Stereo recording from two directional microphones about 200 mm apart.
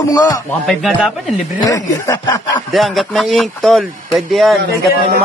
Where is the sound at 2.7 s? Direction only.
Centre (ahead or behind).